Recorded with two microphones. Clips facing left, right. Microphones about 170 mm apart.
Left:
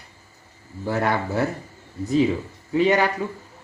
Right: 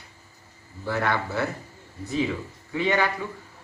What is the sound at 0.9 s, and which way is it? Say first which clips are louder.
Speech: left 3 dB; 40° left (ahead or behind).